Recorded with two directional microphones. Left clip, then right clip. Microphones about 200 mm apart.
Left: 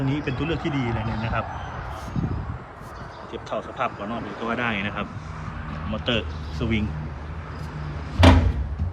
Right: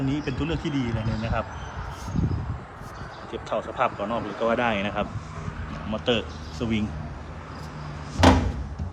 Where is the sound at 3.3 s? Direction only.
15° right (ahead or behind).